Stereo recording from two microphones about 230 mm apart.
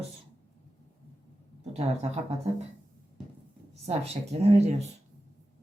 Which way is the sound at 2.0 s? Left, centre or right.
Right.